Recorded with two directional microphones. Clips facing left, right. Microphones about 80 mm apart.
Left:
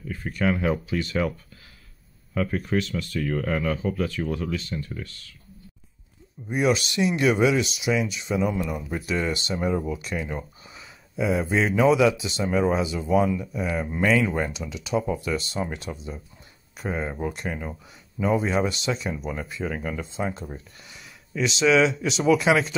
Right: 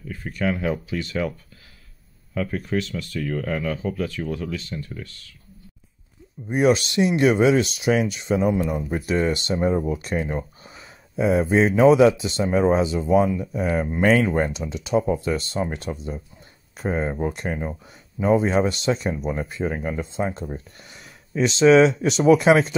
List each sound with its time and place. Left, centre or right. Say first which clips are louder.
0.4 s speech: even; left
2.3 s speech: even; left
6.5 s speech: right 4 dB; right
7.6 s speech: right 4 dB; right
9.8 s speech: right 4 dB; right